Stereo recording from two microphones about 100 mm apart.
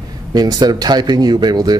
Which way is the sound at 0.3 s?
45° right (ahead or behind).